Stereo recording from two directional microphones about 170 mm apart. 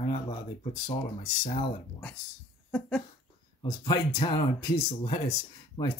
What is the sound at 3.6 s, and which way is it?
Speech, 25° left (ahead or behind).